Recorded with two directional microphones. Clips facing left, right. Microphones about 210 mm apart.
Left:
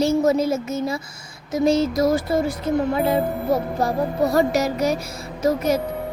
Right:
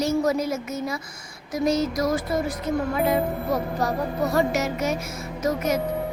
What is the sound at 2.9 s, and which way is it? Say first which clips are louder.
Music: left 2 dB; 30° left (ahead or behind).